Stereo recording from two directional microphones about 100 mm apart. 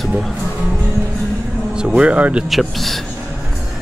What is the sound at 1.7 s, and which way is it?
Speech, 10° right (ahead or behind).